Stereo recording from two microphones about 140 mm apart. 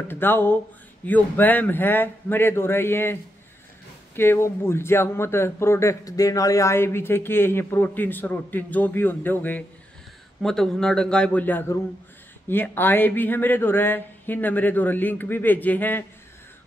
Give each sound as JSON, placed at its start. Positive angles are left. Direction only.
{"t": 0.1, "sound": "a man's voice", "side_deg": 15}